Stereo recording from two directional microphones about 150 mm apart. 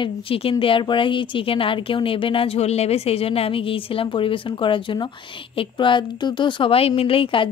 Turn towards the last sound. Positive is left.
turn(degrees=35)  # may be behind; listen again after turning